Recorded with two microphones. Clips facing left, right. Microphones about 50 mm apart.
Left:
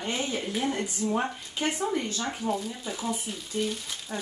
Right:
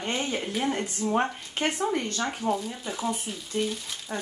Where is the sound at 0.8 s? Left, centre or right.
Right.